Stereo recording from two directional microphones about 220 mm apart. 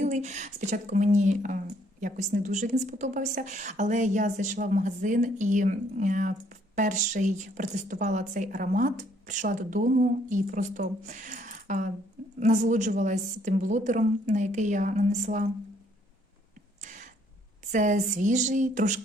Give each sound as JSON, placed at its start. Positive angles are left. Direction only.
{"t": 0.0, "sound": "speech", "side_deg": -30}
{"t": 16.8, "sound": "a sound", "side_deg": -35}
{"t": 17.7, "sound": "speech", "side_deg": -35}